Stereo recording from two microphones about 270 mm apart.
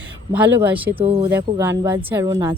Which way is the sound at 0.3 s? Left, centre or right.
Centre.